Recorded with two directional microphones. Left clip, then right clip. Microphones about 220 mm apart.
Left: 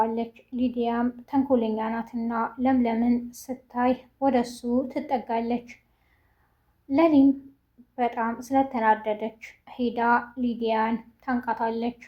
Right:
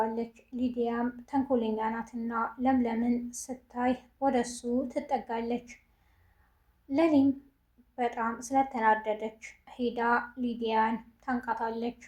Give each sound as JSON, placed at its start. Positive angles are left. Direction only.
{"t": 0.0, "sound": "speech", "side_deg": 35}
{"t": 6.8, "sound": "a woman's voice", "side_deg": 35}